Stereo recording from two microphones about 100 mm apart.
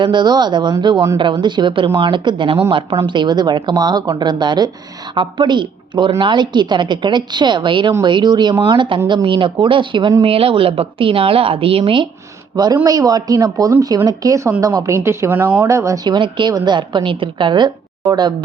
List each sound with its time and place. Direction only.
0.0 s a woman's voice: 50° right (ahead or behind)
2.6 s a woman's voice: 75° right (ahead or behind)
3.1 s a woman's voice: 50° right (ahead or behind)
10.2 s a woman's voice: 70° right (ahead or behind)
12.5 s speech: 40° right (ahead or behind)
14.9 s speech: 25° right (ahead or behind)
15.6 s speech: 30° right (ahead or behind)
16.0 s a woman's voice: 50° right (ahead or behind)